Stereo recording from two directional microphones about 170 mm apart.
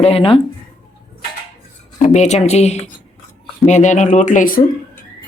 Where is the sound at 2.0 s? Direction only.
45° left (ahead or behind).